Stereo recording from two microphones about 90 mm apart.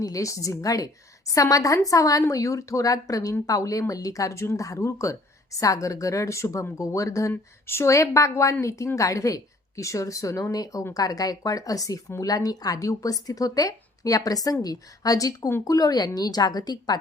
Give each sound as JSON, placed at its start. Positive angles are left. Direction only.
{"t": 0.0, "sound": "speech", "side_deg": 40}